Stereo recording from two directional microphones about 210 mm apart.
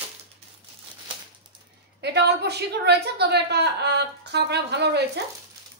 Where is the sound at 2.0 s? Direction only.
50° right (ahead or behind).